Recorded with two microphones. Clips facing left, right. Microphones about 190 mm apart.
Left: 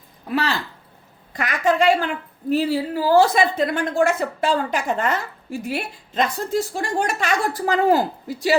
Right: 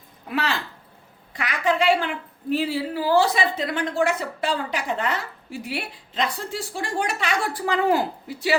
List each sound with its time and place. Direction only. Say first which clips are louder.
0.3 s speech: left 3 dB; 35° left (ahead or behind)
1.3 s a sound: left 3 dB; 45° left (ahead or behind)
2.5 s a woman's voice: left 4 dB; 40° left (ahead or behind)